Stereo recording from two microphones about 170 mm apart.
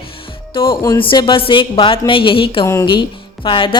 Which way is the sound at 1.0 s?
30° left (ahead or behind).